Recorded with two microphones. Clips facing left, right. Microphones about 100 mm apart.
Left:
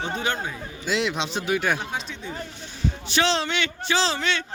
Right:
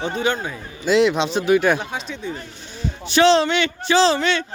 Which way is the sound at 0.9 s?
50° right (ahead or behind).